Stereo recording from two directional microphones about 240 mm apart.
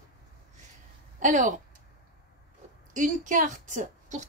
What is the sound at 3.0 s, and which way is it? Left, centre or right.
A woman's voice, right.